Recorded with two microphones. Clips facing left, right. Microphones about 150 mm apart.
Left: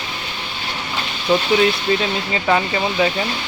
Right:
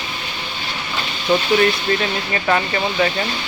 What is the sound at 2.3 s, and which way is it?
Speech, 10° left (ahead or behind).